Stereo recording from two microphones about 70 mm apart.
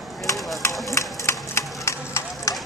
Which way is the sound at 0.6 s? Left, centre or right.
Left.